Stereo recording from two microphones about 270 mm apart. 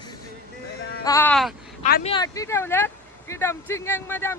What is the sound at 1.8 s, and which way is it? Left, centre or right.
Speech, left.